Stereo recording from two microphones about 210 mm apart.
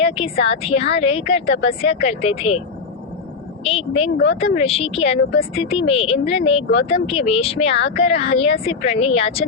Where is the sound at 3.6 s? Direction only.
25° left (ahead or behind).